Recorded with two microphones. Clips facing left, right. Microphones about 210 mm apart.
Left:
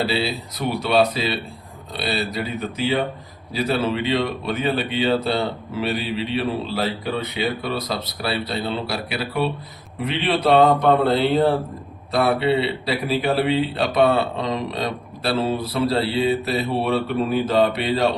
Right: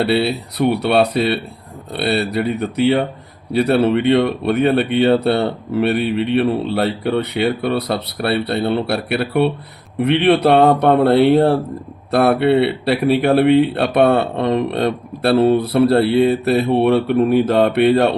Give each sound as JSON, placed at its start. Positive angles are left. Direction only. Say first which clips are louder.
{"t": 0.0, "sound": "speech", "louder": "right 6 dB", "side_deg": -65}